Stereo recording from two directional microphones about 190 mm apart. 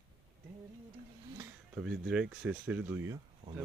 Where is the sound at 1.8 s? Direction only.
5° right (ahead or behind).